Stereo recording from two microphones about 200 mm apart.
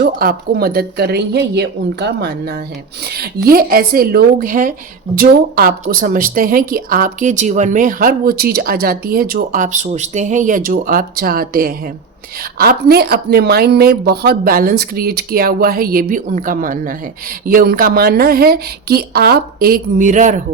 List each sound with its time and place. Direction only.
0.0 s speech: 45° right (ahead or behind)